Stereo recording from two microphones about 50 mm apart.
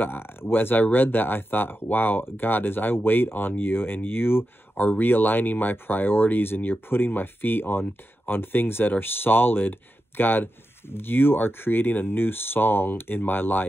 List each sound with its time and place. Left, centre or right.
0.0 s speech: left
4.7 s speech: left